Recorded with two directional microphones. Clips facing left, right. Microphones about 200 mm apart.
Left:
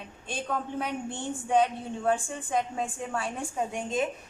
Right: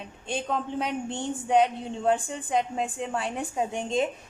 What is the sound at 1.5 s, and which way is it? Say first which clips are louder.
A woman's voice: right 2 dB; 20° right (ahead or behind).